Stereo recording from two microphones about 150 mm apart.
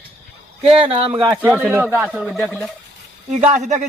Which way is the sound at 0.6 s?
40° right (ahead or behind).